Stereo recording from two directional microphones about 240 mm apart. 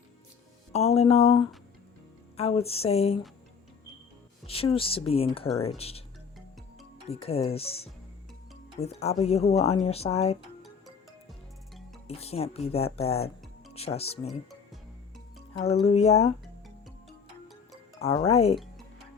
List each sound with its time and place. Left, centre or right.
0.7 s speech: left
4.4 s speech: left
7.1 s speech: left
12.0 s speech: left
15.5 s speech: left
18.0 s speech: left